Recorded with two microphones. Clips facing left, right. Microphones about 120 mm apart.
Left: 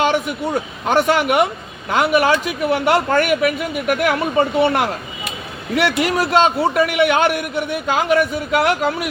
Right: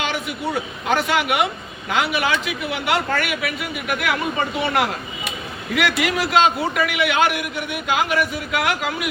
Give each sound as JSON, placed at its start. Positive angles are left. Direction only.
{"t": 0.0, "sound": "a man's voice", "side_deg": 45}